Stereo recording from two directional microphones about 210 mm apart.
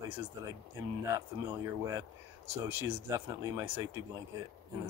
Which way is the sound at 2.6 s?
15° right (ahead or behind).